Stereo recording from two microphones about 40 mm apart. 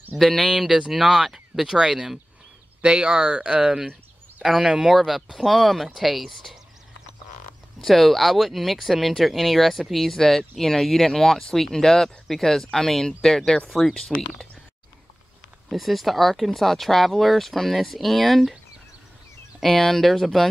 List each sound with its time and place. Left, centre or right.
0.1 s speech: centre
0.7 s speech: right
0.9 s speech: centre
2.8 s speech: right; by 6.3 s centre
7.8 s speech: centre
15.7 s speech: centre
19.6 s speech: centre